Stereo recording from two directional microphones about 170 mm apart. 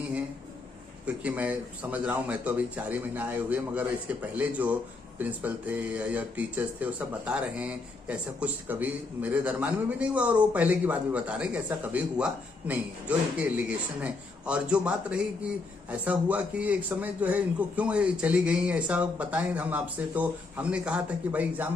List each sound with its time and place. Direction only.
1.0 s speech: 10° right (ahead or behind)